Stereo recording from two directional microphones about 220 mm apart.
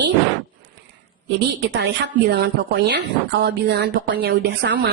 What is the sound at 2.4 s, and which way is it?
A woman's voice, 50° right (ahead or behind).